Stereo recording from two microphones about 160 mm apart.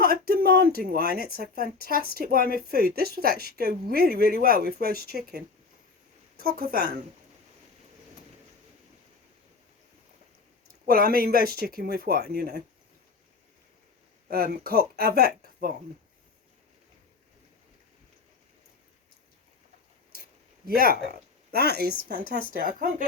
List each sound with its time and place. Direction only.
0.0 s speech: 70° right (ahead or behind)
6.4 s speech: 70° right (ahead or behind)
10.8 s speech: 65° right (ahead or behind)
14.3 s speech: 70° right (ahead or behind)
20.7 s speech: 70° right (ahead or behind); by 21.9 s 85° right
22.1 s speech: 65° right (ahead or behind)